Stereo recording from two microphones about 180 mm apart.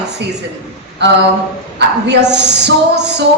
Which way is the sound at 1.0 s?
70° right (ahead or behind).